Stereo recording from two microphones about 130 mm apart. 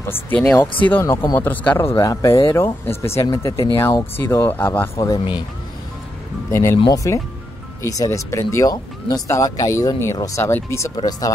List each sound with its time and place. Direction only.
0.8 s speech: 15° left (ahead or behind); by 5.4 s 35° left (ahead or behind)
6.5 s speech: 20° left (ahead or behind)